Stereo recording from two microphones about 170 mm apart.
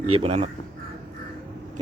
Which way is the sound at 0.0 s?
35° right (ahead or behind).